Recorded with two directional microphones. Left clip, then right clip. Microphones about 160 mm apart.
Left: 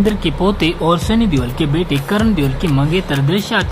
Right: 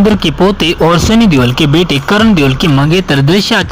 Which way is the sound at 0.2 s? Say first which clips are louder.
Right 6 dB; 25° right (ahead or behind).